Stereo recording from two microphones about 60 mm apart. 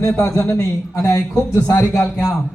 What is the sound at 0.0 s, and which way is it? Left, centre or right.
Music, left.